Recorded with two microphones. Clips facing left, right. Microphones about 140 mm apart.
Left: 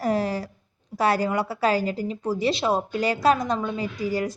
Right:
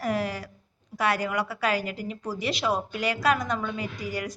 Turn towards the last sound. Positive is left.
turn(degrees=30)  # may be behind; listen again after turning